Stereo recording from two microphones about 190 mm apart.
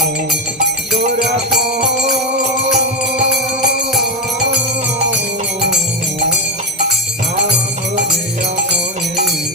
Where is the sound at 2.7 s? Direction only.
60° right (ahead or behind).